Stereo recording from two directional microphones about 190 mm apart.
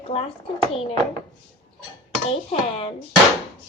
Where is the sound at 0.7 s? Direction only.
30° left (ahead or behind).